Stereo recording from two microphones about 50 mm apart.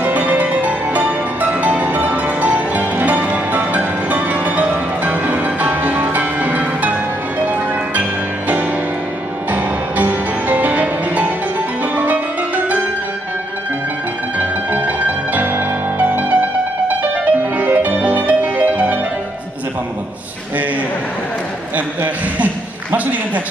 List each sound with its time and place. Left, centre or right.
0.0 s music: right
14.7 s music: right
21.7 s a sound: right